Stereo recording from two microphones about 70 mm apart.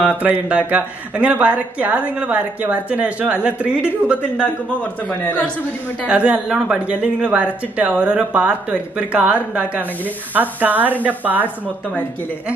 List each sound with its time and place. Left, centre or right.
0.2 s speech: right
6.0 s speech: centre